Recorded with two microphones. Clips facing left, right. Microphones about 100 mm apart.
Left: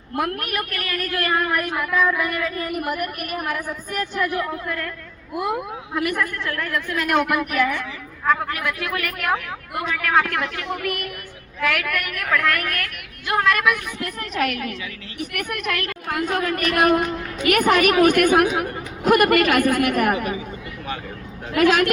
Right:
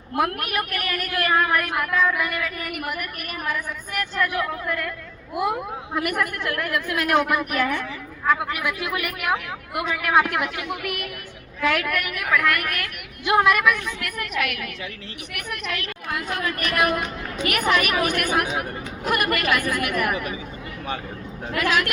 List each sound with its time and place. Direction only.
0.2 s a woman's voice: 10° right (ahead or behind)
2.4 s a woman's voice: 25° left (ahead or behind)
2.9 s a woman's voice: 45° left (ahead or behind)
4.3 s a woman's voice: centre (ahead or behind)
8.3 s a woman's voice: 10° right (ahead or behind)
11.6 s a woman's voice: 25° right (ahead or behind)
12.0 s a woman's voice: 10° right (ahead or behind)
14.0 s a woman's voice: 35° left (ahead or behind)
15.2 s a woman's voice: 50° left (ahead or behind)
21.6 s a woman's voice: 50° left (ahead or behind)